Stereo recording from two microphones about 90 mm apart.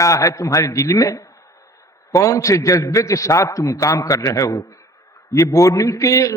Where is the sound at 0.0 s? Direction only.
35° left (ahead or behind).